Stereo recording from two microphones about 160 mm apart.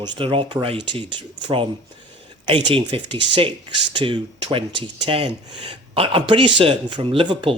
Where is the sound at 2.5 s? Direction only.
35° right (ahead or behind).